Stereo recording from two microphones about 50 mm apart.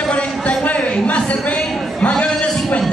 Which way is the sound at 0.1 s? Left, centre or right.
Left.